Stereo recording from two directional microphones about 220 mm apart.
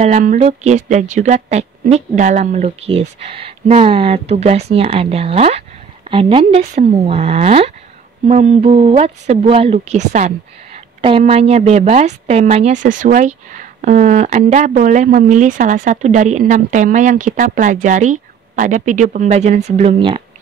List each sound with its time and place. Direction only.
0.0 s speech: 35° right (ahead or behind)